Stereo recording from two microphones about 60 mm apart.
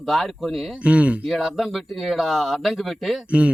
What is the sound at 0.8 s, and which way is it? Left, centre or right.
Speech, right.